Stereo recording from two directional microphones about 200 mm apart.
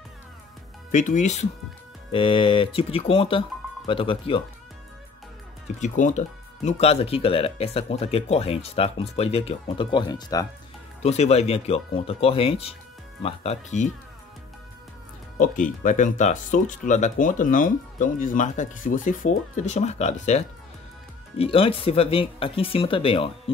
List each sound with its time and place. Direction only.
0.9 s speech: 40° left (ahead or behind)
5.8 s speech: 40° left (ahead or behind); by 10.4 s 20° left (ahead or behind)
11.0 s speech: 35° left (ahead or behind)
15.3 s speech: 40° left (ahead or behind)